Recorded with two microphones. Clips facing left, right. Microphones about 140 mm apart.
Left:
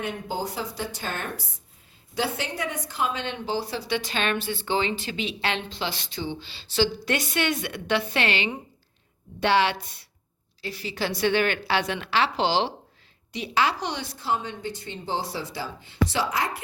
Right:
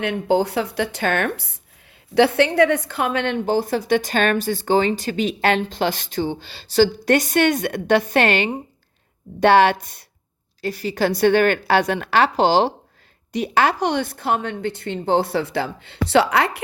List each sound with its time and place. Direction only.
0.0 s a woman's voice: 70° right (ahead or behind)